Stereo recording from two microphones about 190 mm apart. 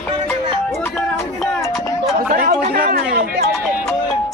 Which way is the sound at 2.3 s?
45° right (ahead or behind).